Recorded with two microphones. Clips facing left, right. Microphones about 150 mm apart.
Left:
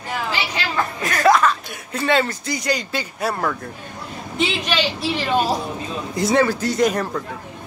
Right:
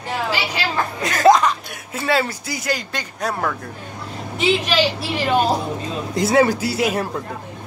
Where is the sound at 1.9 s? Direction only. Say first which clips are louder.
Left 1 dB; 5° right (ahead or behind).